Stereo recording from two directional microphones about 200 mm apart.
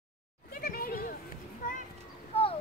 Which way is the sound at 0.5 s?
50° left (ahead or behind).